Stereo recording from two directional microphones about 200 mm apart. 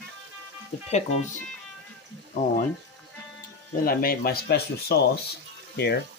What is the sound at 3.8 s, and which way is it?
Speech, 50° left (ahead or behind).